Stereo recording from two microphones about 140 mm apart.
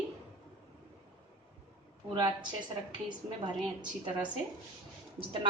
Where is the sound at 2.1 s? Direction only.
30° right (ahead or behind).